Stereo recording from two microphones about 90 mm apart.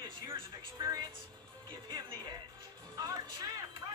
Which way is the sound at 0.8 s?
45° right (ahead or behind).